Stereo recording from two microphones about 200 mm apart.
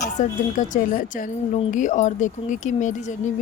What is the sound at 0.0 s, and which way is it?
Speech, 40° left (ahead or behind).